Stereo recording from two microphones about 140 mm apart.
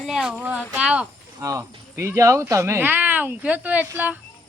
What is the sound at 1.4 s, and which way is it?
Speech, 20° right (ahead or behind).